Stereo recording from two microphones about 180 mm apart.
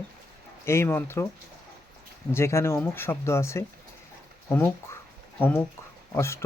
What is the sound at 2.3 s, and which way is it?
Speech, 15° left (ahead or behind).